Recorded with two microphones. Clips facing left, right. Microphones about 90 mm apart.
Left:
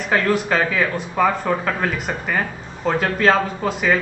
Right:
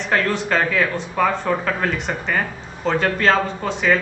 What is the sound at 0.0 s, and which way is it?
Speech, 5° left (ahead or behind).